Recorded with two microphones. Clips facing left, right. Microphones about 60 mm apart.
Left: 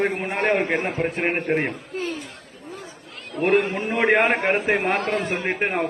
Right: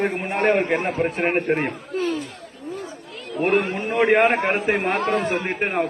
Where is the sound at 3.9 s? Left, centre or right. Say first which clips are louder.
Right 2 dB; left.